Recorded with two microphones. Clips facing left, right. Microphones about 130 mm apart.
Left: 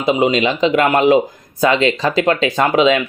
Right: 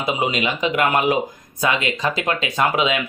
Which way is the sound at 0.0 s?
25° left (ahead or behind).